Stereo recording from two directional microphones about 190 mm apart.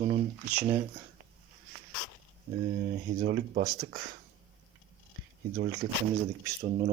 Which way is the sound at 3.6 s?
20° right (ahead or behind).